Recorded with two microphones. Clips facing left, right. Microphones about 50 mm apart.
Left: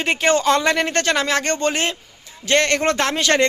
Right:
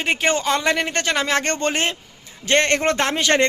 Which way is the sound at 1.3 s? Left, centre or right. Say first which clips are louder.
Left 1 dB; right.